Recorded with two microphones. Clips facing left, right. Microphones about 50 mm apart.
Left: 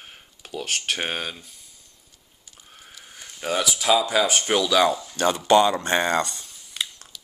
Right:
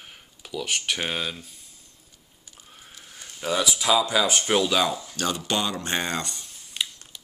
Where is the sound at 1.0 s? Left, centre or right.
Centre.